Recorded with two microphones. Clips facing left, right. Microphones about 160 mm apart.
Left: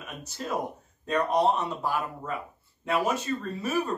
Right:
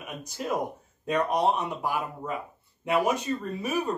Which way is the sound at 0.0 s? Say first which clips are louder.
Right 2 dB; 15° right (ahead or behind).